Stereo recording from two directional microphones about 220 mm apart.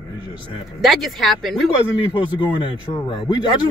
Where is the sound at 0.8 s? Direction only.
Centre (ahead or behind).